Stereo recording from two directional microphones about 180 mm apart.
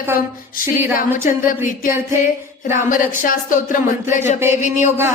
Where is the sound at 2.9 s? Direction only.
50° left (ahead or behind).